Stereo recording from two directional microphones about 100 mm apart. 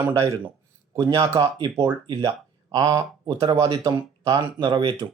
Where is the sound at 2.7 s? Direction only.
40° right (ahead or behind).